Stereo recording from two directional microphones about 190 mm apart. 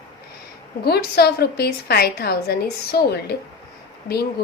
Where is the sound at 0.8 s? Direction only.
55° left (ahead or behind).